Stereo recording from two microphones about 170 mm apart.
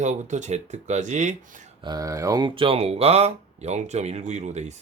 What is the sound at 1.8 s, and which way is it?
Speech, 25° right (ahead or behind).